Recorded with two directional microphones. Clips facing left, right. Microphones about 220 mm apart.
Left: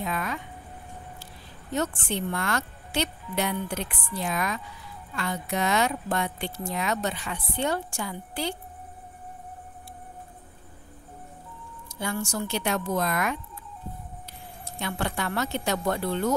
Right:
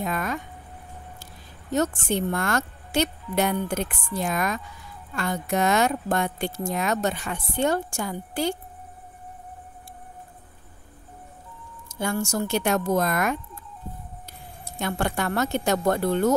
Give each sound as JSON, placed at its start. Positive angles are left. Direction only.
{"t": 0.0, "sound": "a woman's voice", "side_deg": -45}
{"t": 12.0, "sound": "speech", "side_deg": -45}
{"t": 14.8, "sound": "speech", "side_deg": -45}